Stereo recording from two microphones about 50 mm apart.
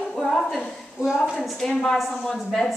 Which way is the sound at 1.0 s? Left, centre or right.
Centre.